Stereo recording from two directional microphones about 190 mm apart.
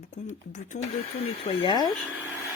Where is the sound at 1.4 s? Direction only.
25° left (ahead or behind).